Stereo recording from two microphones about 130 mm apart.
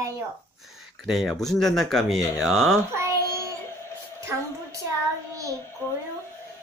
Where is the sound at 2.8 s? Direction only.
20° right (ahead or behind).